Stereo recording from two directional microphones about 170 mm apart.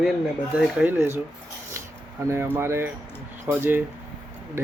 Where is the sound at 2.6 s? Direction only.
15° right (ahead or behind).